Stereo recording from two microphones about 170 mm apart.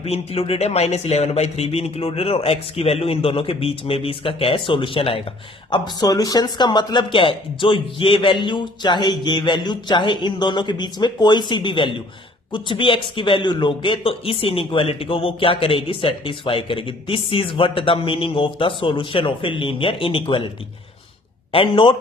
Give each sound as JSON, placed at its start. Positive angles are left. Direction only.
{"t": 0.0, "sound": "a man's voice", "side_deg": 35}
{"t": 21.5, "sound": "a man's voice", "side_deg": 35}